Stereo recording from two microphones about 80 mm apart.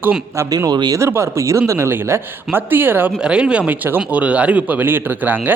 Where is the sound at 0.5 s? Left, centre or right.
Right.